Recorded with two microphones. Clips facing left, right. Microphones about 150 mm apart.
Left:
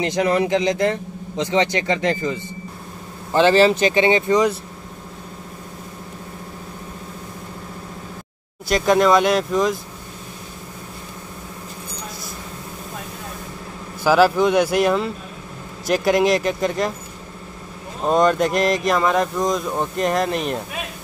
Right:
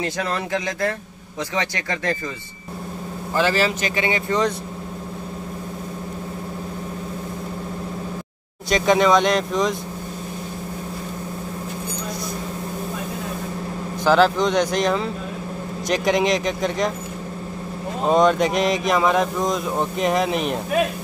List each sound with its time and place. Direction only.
0.0 s speech: 20° left (ahead or behind)
3.3 s speech: 25° left (ahead or behind)
4.3 s speech: 10° left (ahead or behind)
8.6 s speech: centre (ahead or behind)
14.0 s speech: 5° left (ahead or behind)
18.1 s speech: centre (ahead or behind)